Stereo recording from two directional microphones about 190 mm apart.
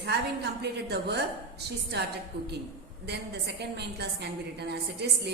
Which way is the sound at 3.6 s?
60° right (ahead or behind).